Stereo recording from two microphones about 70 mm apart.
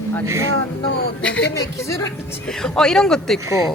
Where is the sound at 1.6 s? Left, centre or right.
Left.